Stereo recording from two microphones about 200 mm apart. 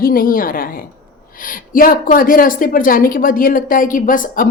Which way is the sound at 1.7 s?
45° left (ahead or behind).